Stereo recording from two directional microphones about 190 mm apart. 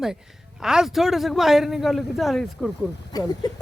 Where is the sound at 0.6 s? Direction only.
5° right (ahead or behind).